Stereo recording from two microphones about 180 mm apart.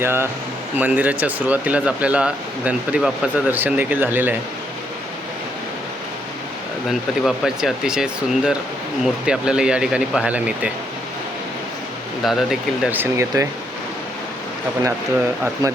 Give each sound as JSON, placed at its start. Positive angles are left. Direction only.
{"t": 0.0, "sound": "speech", "side_deg": -15}
{"t": 7.3, "sound": "speech", "side_deg": -5}
{"t": 12.2, "sound": "speech", "side_deg": 0}
{"t": 15.6, "sound": "speech", "side_deg": -20}